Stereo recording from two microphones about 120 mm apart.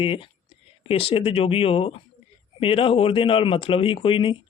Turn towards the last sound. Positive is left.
turn(degrees=45)  # may be behind; listen again after turning